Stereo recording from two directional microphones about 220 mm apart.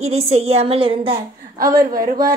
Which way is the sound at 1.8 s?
40° right (ahead or behind).